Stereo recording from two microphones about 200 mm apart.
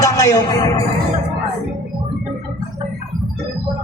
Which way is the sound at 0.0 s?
15° left (ahead or behind).